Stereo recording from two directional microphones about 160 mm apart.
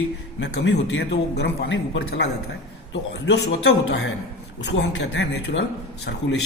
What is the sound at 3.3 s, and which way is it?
A man's voice, 90° left.